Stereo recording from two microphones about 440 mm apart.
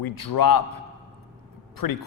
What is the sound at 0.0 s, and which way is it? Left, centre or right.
Speech, left.